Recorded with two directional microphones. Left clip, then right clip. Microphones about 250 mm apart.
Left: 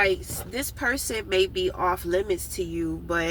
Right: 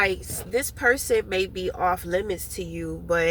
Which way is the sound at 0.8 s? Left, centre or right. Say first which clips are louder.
Right 6 dB; centre.